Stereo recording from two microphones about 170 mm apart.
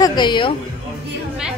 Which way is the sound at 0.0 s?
25° left (ahead or behind).